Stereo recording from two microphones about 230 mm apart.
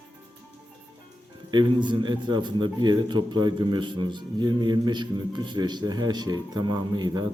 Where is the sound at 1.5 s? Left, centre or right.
Centre.